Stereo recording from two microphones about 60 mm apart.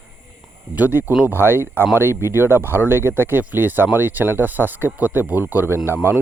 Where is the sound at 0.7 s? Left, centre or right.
Right.